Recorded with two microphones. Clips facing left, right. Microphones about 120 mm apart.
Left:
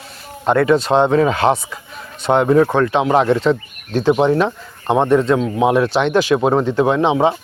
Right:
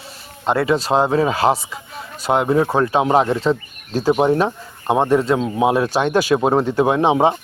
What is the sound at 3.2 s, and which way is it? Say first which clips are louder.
Speech: left 3 dB; 5° right (ahead or behind).